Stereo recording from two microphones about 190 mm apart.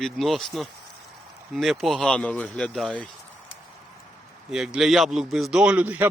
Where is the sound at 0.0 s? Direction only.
Centre (ahead or behind).